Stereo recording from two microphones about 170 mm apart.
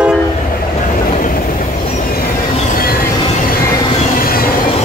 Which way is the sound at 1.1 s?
55° left (ahead or behind).